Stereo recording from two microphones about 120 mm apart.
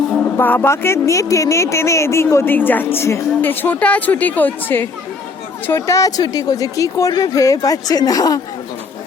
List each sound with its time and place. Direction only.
0.3 s speech: 15° left (ahead or behind); by 8.4 s 30° left (ahead or behind)